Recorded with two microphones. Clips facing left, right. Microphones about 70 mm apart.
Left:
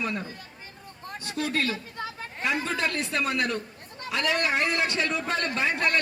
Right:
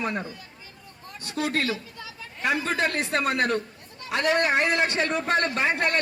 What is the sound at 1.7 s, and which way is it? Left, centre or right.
Chatter, left.